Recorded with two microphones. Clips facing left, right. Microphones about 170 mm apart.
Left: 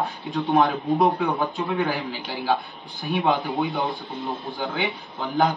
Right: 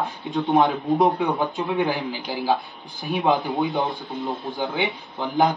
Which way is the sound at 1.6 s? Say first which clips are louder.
Right 2 dB; 25° right (ahead or behind).